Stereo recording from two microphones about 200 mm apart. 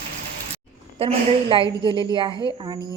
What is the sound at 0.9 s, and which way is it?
A woman's voice, 25° right (ahead or behind).